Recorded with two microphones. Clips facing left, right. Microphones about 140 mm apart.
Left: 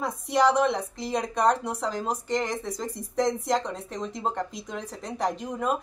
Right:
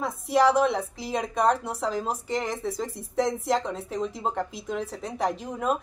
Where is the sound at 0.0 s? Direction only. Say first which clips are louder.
Right 1 dB; 5° right (ahead or behind).